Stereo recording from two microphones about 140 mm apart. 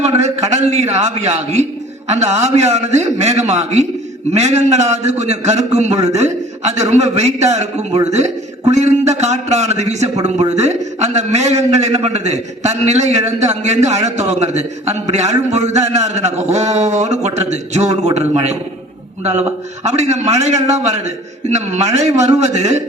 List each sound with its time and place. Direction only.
0.0 s a man's voice: 55° right (ahead or behind)